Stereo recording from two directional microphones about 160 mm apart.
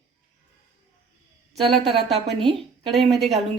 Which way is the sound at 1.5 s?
Centre (ahead or behind).